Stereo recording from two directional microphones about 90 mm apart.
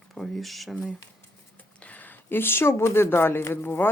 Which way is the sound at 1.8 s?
15° left (ahead or behind).